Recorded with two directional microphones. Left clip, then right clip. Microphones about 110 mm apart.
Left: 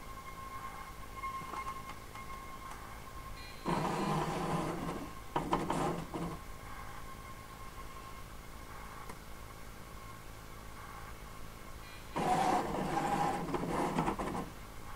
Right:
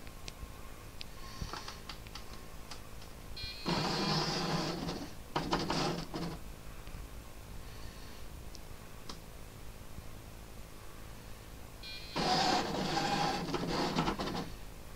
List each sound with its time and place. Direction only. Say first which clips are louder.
3.6 s printer: even; 20° right (ahead or behind)
12.1 s printer: even; 15° right (ahead or behind)